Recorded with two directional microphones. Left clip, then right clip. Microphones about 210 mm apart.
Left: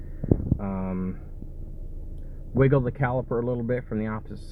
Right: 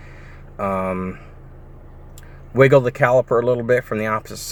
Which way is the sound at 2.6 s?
90° right.